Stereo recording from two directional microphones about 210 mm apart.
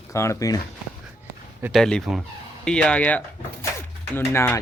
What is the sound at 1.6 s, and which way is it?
Speech, centre (ahead or behind).